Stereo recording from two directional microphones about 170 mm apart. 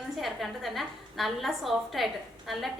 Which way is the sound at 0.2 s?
Centre (ahead or behind).